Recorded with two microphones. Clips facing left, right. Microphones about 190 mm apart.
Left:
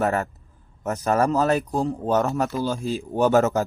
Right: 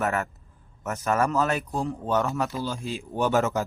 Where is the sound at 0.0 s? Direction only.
35° left (ahead or behind).